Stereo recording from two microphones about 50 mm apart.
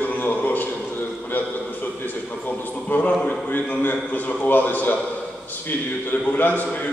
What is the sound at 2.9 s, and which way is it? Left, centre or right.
A man's voice, left.